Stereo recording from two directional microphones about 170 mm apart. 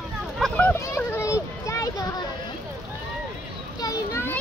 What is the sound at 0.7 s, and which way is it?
Children playing, 15° left (ahead or behind).